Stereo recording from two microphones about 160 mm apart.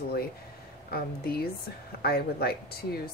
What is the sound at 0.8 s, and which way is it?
A woman's voice, 75° left (ahead or behind).